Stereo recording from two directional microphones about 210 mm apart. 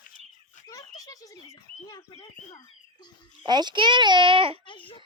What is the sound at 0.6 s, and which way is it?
Bird, 15° left (ahead or behind).